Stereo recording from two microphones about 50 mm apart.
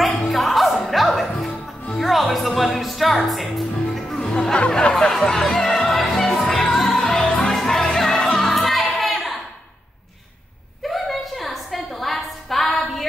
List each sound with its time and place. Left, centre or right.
0.0 s music: centre
5.1 s speech: centre
5.9 s music: centre
10.9 s a sound: centre